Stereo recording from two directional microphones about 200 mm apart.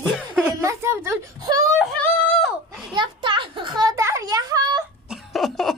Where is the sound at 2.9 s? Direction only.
25° right (ahead or behind).